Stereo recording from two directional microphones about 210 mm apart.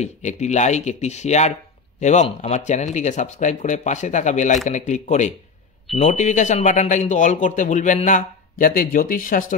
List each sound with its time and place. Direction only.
0.0 s speech: 35° left (ahead or behind)